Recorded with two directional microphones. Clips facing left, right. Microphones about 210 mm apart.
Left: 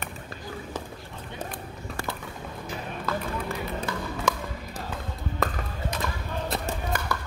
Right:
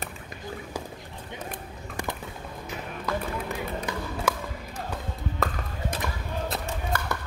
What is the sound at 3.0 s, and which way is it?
Run, 15° right (ahead or behind).